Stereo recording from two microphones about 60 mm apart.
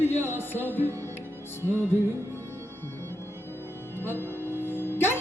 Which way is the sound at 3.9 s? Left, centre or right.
Left.